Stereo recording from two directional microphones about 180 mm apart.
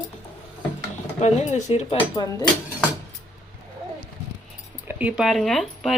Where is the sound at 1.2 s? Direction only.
40° left (ahead or behind).